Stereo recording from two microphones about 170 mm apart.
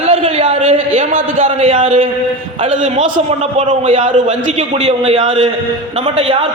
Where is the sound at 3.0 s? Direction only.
30° right (ahead or behind).